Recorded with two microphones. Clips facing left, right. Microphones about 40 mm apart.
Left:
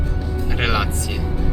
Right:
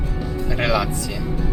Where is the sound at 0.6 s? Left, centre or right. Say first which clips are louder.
Right 1 dB; left.